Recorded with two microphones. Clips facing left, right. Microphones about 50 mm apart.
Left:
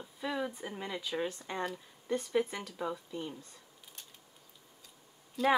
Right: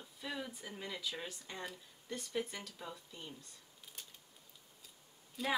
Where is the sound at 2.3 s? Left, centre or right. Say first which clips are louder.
Left 5 dB; centre.